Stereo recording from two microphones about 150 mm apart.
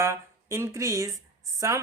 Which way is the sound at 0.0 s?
20° right (ahead or behind).